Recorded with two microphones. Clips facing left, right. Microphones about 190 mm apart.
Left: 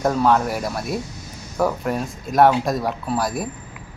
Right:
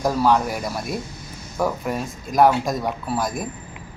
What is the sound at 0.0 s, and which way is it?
Speech, 5° right (ahead or behind).